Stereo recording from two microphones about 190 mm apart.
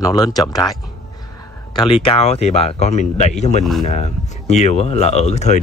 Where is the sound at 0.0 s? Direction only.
20° left (ahead or behind).